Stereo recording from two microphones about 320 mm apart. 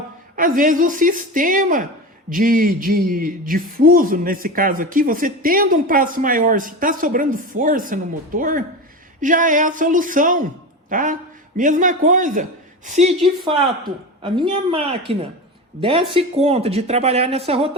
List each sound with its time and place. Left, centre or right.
0.3 s a man's voice: right